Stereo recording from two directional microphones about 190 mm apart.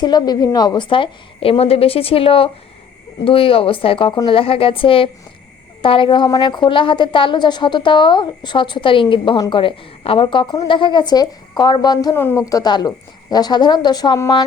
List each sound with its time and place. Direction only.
0.0 s a woman's voice: 20° left (ahead or behind)